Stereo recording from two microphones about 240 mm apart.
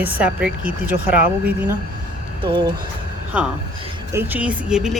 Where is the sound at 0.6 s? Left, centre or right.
Right.